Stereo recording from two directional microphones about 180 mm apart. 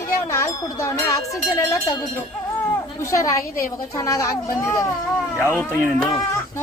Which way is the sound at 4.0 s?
15° left (ahead or behind).